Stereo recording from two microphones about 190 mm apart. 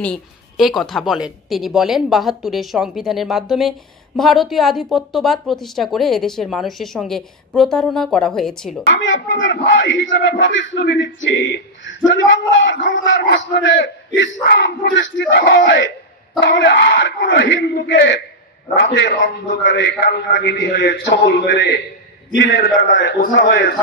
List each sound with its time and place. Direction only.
0.0 s speech: centre (ahead or behind)
8.8 s a man's voice: 75° left (ahead or behind); by 23.7 s 60° left (ahead or behind)